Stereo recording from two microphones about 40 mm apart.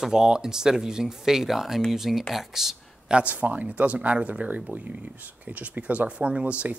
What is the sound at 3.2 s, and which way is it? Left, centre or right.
Speech, right.